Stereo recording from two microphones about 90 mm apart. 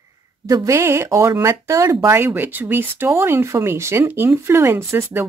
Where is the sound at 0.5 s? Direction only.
35° right (ahead or behind).